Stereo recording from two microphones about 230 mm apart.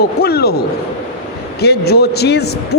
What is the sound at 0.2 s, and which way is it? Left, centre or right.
Speech, left.